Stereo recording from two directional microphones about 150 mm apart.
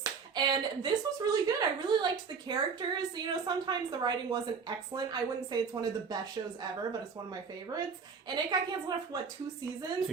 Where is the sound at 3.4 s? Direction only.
30° right (ahead or behind).